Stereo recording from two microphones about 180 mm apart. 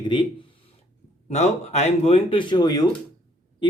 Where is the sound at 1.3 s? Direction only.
40° left (ahead or behind).